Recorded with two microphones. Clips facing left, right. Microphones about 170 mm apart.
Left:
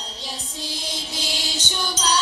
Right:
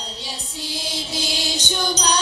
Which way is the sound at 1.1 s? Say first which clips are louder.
Right 5 dB; 15° right (ahead or behind).